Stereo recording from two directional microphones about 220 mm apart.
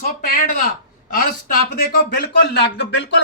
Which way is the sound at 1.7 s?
40° left (ahead or behind).